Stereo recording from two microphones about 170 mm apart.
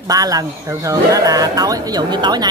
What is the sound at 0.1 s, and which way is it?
Speech, 20° right (ahead or behind).